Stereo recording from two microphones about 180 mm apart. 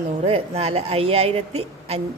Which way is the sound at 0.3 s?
35° right (ahead or behind).